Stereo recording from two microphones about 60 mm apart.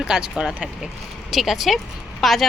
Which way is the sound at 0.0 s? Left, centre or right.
Centre.